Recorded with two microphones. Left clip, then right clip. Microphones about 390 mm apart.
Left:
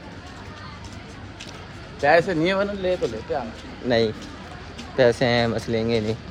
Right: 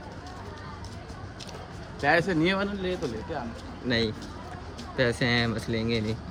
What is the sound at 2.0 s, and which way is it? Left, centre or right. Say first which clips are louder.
Speech: left 6 dB; centre.